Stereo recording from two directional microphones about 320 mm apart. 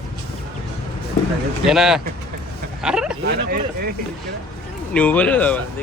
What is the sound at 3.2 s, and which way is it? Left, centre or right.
Speech, right.